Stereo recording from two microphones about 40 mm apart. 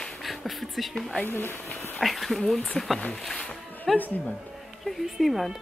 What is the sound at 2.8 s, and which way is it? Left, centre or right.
Speech, centre.